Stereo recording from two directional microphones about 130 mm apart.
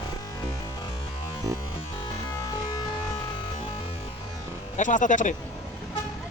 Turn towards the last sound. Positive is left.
turn(degrees=75)  # may be behind; listen again after turning